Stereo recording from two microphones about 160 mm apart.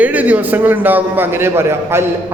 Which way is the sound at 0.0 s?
10° right (ahead or behind).